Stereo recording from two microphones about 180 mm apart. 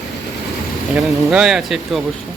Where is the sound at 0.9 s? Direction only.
5° right (ahead or behind).